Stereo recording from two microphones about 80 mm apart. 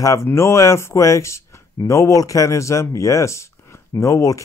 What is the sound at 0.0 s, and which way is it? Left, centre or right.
Speech, left.